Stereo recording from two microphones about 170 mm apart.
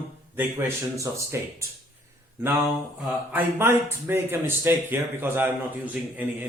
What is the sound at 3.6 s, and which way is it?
Speech, 15° right (ahead or behind).